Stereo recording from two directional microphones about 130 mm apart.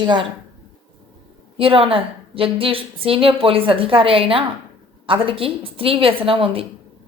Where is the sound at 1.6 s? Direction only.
45° right (ahead or behind).